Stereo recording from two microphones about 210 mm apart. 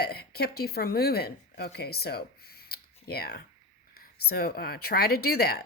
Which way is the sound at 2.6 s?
50° left (ahead or behind).